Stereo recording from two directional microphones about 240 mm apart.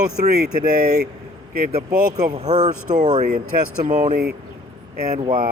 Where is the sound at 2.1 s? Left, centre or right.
Right.